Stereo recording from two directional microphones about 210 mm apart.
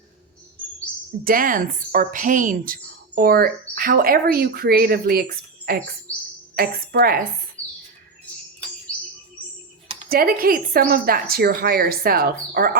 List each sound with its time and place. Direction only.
1.2 s a woman's voice: 40° right (ahead or behind)
10.1 s a woman's voice: 45° right (ahead or behind)